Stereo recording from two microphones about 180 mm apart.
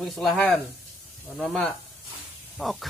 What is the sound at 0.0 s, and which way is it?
Speech, centre (ahead or behind).